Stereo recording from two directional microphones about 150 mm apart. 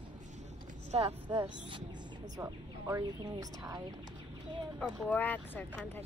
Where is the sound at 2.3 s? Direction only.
20° right (ahead or behind).